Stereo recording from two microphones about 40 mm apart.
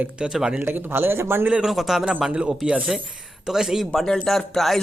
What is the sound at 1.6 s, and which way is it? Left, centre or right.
Speech, centre.